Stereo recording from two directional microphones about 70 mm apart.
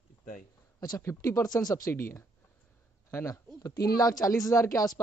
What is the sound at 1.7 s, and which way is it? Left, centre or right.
Speech, left.